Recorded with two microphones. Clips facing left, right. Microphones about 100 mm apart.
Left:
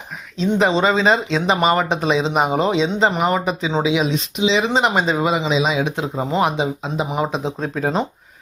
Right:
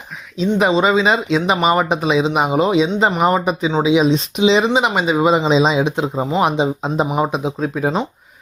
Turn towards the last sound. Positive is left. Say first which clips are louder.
# right 3 dB
turn(degrees=-5)  # may be behind; listen again after turning